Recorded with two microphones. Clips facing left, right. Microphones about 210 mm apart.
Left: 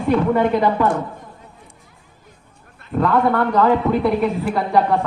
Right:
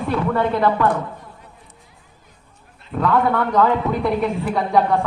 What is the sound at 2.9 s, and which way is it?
A woman's voice, centre (ahead or behind).